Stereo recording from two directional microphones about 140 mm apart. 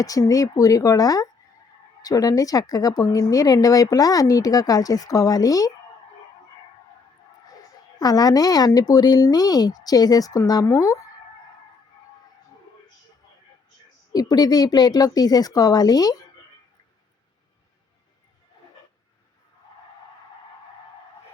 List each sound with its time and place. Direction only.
0.0 s a woman's voice: 25° left (ahead or behind)
7.9 s a woman's voice: 25° left (ahead or behind)
14.1 s a woman's voice: 30° left (ahead or behind)